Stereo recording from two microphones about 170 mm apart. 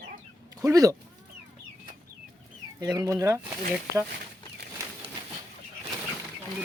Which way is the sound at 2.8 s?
20° right (ahead or behind).